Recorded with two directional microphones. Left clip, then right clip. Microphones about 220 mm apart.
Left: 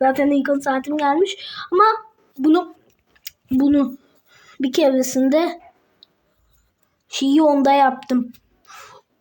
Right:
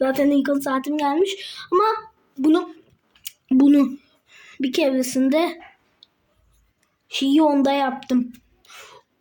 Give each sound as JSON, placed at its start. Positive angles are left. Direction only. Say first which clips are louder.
{"t": 0.0, "sound": "speech", "louder": "left 2 dB", "side_deg": 0}
{"t": 3.6, "sound": "speech", "louder": "right 1 dB", "side_deg": -20}
{"t": 4.3, "sound": "speech", "louder": "left 2 dB", "side_deg": 0}
{"t": 6.0, "sound": "a sound", "louder": "left 2 dB", "side_deg": 0}
{"t": 7.1, "sound": "speech", "louder": "left 2 dB", "side_deg": 0}
{"t": 8.6, "sound": "a sound", "louder": "left 2 dB", "side_deg": 0}